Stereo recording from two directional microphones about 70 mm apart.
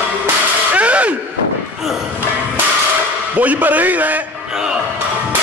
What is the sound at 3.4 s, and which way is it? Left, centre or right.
Speech, right.